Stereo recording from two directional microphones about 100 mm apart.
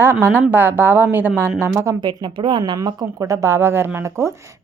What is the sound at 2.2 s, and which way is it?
Speech, 55° right (ahead or behind).